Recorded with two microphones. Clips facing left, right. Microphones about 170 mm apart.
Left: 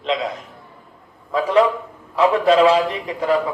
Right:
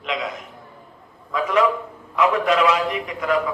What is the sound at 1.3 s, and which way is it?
A man's voice, 30° left (ahead or behind).